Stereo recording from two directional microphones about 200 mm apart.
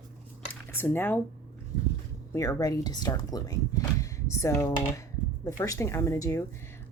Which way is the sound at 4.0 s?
15° left (ahead or behind).